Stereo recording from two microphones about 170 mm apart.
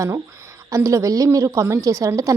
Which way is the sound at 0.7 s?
20° right (ahead or behind).